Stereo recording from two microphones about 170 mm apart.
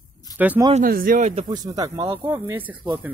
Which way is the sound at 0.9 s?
55° right (ahead or behind).